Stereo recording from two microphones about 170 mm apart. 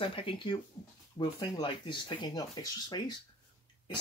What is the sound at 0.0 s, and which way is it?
Speech, 30° left (ahead or behind).